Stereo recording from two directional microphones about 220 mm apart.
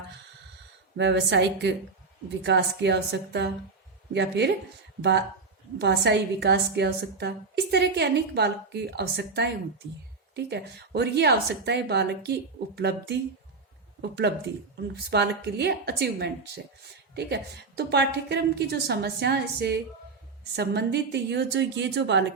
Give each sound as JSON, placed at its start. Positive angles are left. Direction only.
{"t": 0.9, "sound": "a woman's voice", "side_deg": -55}
{"t": 5.8, "sound": "a woman's voice", "side_deg": -50}